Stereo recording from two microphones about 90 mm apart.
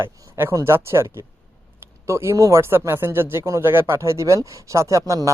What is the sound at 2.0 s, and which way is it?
Speech, 35° right (ahead or behind).